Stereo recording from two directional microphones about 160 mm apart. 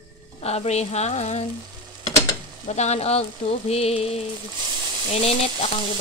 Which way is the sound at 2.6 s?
45° left (ahead or behind).